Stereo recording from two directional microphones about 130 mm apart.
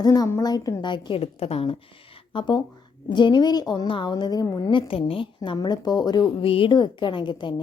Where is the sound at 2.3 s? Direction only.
35° left (ahead or behind).